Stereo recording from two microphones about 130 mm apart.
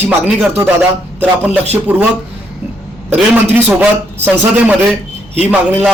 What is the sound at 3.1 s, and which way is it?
A man's voice, 15° right (ahead or behind).